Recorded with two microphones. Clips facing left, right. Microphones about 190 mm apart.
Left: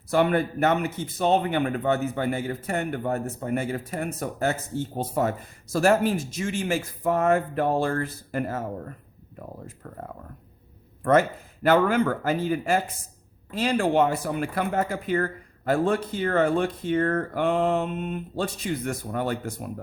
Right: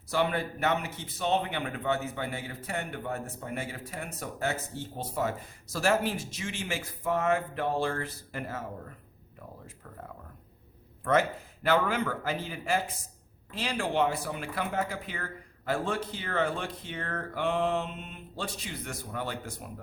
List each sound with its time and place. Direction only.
0.1 s speech: 50° left (ahead or behind)
11.0 s speech: 50° left (ahead or behind)